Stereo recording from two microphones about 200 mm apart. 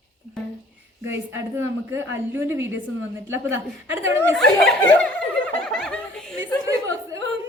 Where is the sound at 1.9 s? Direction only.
10° right (ahead or behind).